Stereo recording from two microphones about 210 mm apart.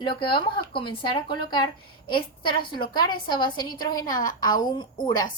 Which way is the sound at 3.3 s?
20° left (ahead or behind).